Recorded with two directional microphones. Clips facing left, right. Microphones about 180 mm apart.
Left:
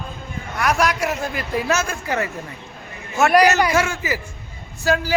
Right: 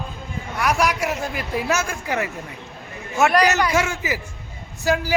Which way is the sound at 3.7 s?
20° right (ahead or behind).